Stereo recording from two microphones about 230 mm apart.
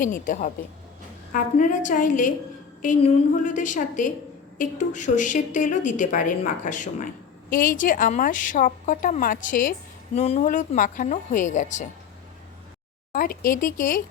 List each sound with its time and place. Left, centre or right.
0.0 s a woman's voice: left
13.1 s a woman's voice: left